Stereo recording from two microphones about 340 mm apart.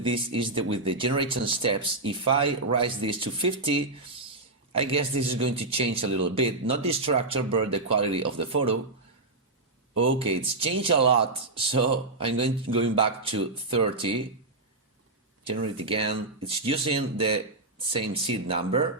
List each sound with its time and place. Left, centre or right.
0.0 s speech: centre
10.0 s speech: centre
15.4 s speech: centre